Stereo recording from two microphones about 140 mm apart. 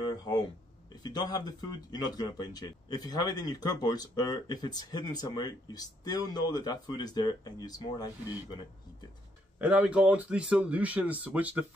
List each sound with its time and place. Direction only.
1.0 s speech: 30° left (ahead or behind)
9.6 s speech: 10° right (ahead or behind)